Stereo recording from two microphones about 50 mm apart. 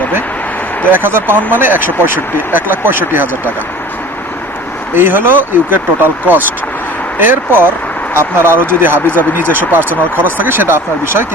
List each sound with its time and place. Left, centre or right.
0.9 s speech: right
4.9 s speech: right